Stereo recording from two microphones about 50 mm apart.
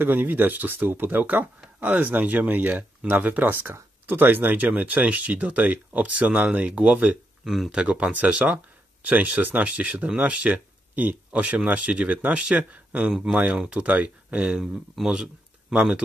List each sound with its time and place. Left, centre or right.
0.0 s speech: right
7.4 s speech: centre
7.7 s speech: centre
8.1 s speech: right
13.1 s speech: centre
13.6 s speech: right
14.6 s speech: centre